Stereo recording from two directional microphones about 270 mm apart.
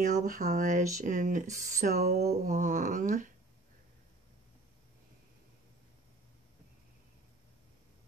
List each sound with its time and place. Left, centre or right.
0.0 s speech: right